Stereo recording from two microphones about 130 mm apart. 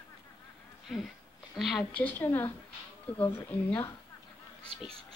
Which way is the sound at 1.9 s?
15° left (ahead or behind).